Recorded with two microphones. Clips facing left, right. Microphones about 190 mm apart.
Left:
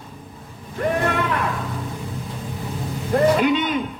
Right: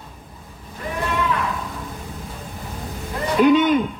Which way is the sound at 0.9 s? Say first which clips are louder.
Right 1 dB; 55° left (ahead or behind).